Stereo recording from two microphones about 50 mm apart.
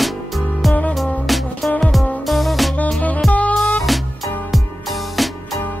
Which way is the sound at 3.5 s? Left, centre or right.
Centre.